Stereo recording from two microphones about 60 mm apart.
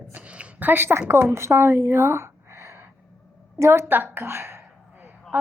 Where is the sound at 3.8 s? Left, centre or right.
Right.